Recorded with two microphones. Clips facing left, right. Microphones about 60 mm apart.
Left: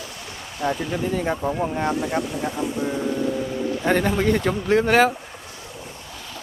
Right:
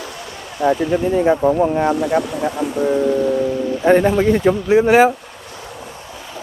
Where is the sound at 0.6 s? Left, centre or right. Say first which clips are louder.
Right 8 dB; centre.